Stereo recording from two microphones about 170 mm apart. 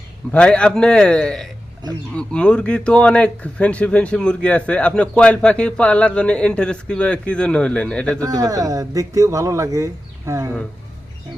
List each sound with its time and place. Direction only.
0.3 s a man's voice: 5° left (ahead or behind)
8.2 s speech: 20° right (ahead or behind)